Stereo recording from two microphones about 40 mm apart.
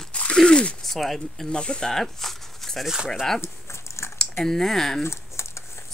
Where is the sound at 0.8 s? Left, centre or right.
Centre.